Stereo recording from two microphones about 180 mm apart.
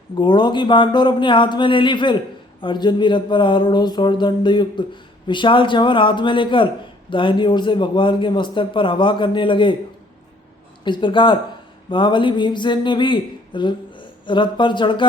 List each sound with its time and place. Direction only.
0.2 s a man's voice: 25° left (ahead or behind)
10.8 s a man's voice: 25° left (ahead or behind)